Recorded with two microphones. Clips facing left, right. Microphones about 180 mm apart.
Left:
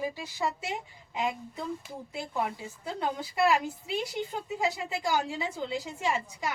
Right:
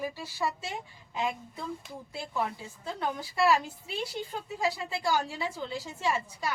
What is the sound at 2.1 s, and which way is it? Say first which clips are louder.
A woman's voice: left 1 dB; 20° left (ahead or behind).